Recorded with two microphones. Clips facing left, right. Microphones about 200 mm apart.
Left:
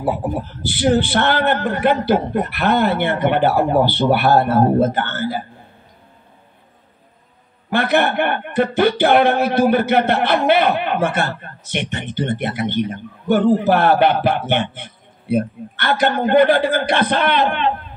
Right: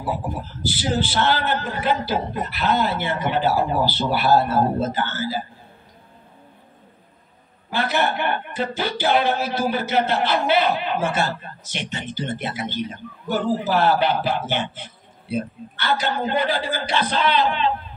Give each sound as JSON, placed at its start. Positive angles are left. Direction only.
{"t": 0.0, "sound": "speech", "side_deg": 60}
{"t": 7.7, "sound": "speech", "side_deg": 60}